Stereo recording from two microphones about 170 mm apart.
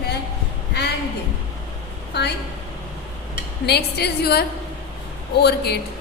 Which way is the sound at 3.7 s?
70° left (ahead or behind).